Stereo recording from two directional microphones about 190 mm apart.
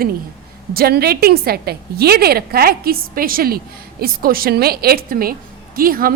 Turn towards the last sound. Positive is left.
turn(degrees=-50)  # may be behind; listen again after turning